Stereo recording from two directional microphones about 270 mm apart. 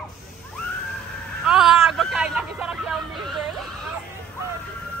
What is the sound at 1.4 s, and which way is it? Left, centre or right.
Music, centre.